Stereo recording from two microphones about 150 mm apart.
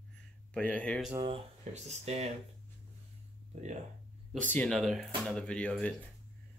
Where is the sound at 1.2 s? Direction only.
45° right (ahead or behind).